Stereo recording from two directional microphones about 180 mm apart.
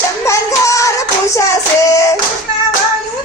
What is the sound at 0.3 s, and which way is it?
Child singing, 15° left (ahead or behind).